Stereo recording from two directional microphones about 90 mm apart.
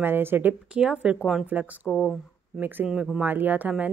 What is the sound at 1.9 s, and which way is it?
Speech, 5° left (ahead or behind).